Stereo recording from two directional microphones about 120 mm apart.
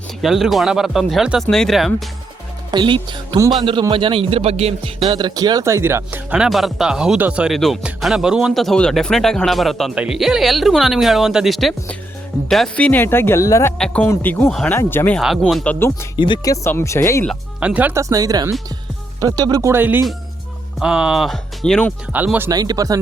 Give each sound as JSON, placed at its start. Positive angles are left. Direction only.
{"t": 0.2, "sound": "speech", "side_deg": 0}
{"t": 2.7, "sound": "speech", "side_deg": -40}
{"t": 5.0, "sound": "speech", "side_deg": -35}
{"t": 6.4, "sound": "speech", "side_deg": 0}
{"t": 13.7, "sound": "speech", "side_deg": 10}
{"t": 15.2, "sound": "speech", "side_deg": 0}
{"t": 16.1, "sound": "speech", "side_deg": 40}
{"t": 16.5, "sound": "speech", "side_deg": 25}
{"t": 17.6, "sound": "speech", "side_deg": -10}
{"t": 17.9, "sound": "speech", "side_deg": -30}
{"t": 19.7, "sound": "speech", "side_deg": -15}
{"t": 22.1, "sound": "speech", "side_deg": -15}
{"t": 22.4, "sound": "speech", "side_deg": -30}